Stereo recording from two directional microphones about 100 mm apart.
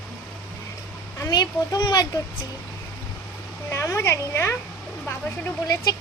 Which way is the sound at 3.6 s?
30° left (ahead or behind).